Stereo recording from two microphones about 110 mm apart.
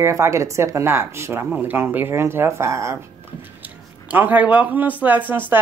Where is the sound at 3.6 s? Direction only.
15° right (ahead or behind).